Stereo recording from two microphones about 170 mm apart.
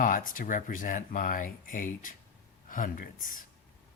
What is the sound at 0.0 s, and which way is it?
Speech, 55° left (ahead or behind).